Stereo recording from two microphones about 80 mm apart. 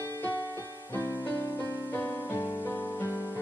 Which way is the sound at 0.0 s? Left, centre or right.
Left.